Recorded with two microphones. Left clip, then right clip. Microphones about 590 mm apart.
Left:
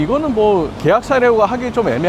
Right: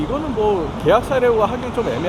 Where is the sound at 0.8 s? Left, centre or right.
Left.